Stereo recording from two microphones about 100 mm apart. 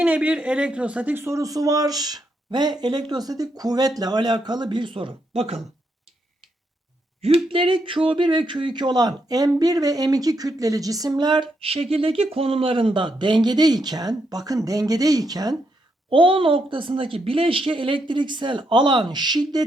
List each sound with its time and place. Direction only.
0.0 s speech: 15° right (ahead or behind)
1.2 s speech: 30° right (ahead or behind); by 5.5 s 85° right
7.2 s speech: 85° right; by 11.4 s 45° right (ahead or behind)
11.6 s speech: 75° right (ahead or behind); by 15.5 s 40° right (ahead or behind)
16.0 s speech: 65° right (ahead or behind); by 19.6 s 45° right (ahead or behind)